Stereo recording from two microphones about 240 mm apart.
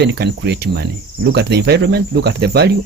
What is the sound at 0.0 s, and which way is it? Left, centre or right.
Speech, right.